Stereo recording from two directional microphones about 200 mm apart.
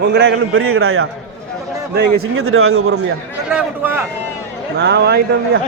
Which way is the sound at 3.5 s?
10° right (ahead or behind).